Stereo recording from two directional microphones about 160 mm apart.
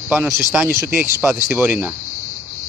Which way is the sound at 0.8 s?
10° right (ahead or behind).